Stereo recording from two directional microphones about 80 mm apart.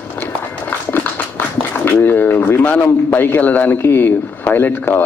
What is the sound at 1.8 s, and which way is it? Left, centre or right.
A man's voice, left.